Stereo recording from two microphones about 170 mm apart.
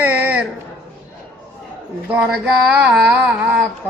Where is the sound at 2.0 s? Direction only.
5° right (ahead or behind).